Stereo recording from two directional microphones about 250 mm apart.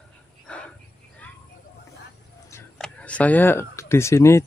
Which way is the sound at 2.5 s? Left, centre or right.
Centre.